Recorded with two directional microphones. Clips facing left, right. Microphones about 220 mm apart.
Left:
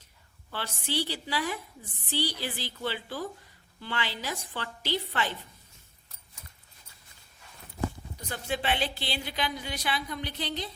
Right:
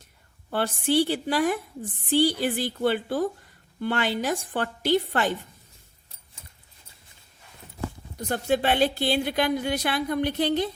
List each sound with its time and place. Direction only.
0.5 s a woman's voice: 50° right (ahead or behind)
8.3 s a woman's voice: 45° right (ahead or behind)